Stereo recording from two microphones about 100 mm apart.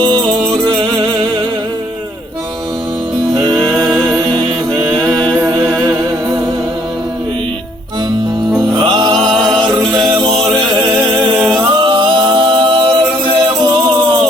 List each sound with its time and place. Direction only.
3.6 s music: centre (ahead or behind)
8.8 s music: 50° right (ahead or behind)
9.1 s music: 5° left (ahead or behind)
11.3 s a capella: centre (ahead or behind)
11.8 s a capella: 50° right (ahead or behind)